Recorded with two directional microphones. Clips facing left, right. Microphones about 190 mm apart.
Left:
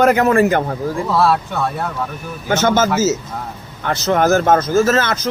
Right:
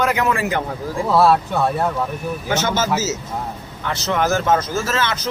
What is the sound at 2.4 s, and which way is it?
A man's voice, 50° left (ahead or behind).